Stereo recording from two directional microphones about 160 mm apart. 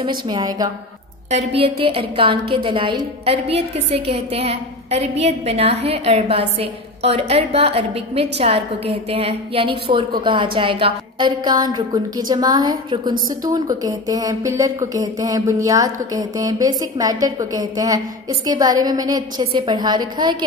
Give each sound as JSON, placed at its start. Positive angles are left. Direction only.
{"t": 0.3, "sound": "speech", "side_deg": -25}
{"t": 1.3, "sound": "a woman's voice", "side_deg": -35}